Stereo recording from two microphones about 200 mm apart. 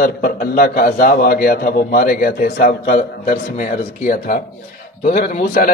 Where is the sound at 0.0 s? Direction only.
45° left (ahead or behind).